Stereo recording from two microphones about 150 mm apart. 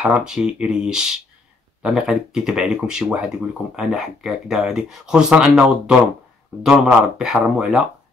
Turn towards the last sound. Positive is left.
turn(degrees=-5)  # may be behind; listen again after turning